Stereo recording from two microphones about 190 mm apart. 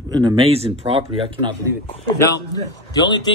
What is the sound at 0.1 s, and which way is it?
Speech, 20° right (ahead or behind).